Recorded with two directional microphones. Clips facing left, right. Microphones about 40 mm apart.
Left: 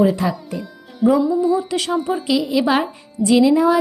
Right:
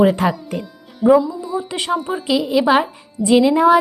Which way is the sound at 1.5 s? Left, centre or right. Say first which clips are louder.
Left 1 dB; centre.